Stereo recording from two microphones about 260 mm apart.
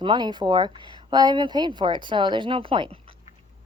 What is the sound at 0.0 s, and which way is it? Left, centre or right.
A woman's voice, centre.